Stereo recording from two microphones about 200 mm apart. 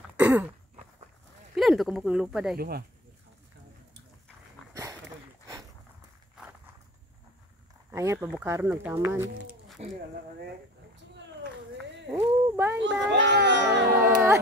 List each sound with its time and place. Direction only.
0.0 s throat clearing: 10° right (ahead or behind)
1.5 s speech: centre (ahead or behind)
2.5 s speech: 50° right (ahead or behind)
7.9 s speech: 15° right (ahead or behind)
9.7 s a sound: centre (ahead or behind)
12.1 s a sound: 10° right (ahead or behind)
12.8 s a child's voice: 65° right (ahead or behind)